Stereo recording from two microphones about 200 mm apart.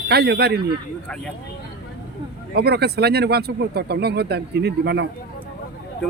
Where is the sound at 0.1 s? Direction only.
55° right (ahead or behind).